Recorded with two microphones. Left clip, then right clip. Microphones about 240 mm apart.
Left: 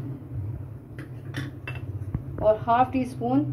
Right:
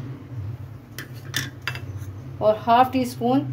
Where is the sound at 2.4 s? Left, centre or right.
Right.